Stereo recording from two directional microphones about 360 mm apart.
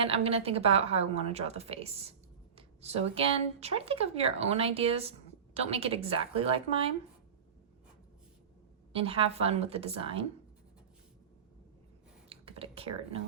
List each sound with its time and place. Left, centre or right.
0.0 s speech: centre
8.9 s speech: centre
12.3 s a sound: centre